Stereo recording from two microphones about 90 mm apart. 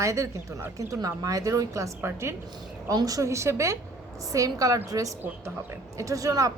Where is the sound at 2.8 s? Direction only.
40° right (ahead or behind).